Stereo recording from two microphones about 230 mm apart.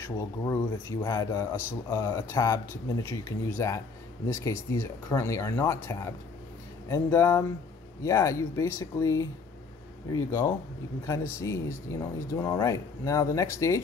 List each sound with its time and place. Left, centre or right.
0.0 s speech: centre